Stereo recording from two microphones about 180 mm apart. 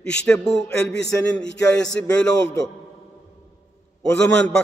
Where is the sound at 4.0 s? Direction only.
5° left (ahead or behind).